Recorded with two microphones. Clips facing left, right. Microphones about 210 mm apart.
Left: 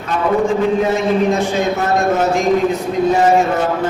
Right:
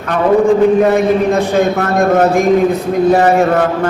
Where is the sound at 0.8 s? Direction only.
60° right (ahead or behind).